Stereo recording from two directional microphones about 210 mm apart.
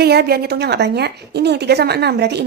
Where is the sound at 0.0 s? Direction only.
50° right (ahead or behind).